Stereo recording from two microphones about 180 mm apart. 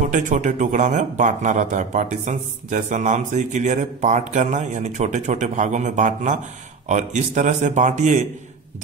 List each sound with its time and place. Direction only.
0.1 s speech: 45° right (ahead or behind)